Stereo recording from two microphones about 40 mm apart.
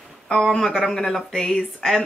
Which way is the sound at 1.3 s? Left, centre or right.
Centre.